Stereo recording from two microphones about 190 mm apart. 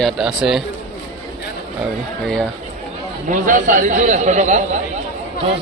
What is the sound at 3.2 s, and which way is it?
A man's voice, 45° right (ahead or behind).